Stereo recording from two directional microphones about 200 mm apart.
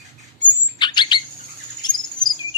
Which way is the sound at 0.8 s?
20° left (ahead or behind).